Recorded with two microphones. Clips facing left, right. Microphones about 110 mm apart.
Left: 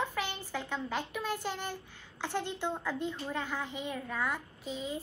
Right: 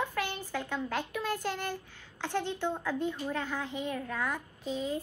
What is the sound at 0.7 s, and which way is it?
A child's voice, 15° left (ahead or behind).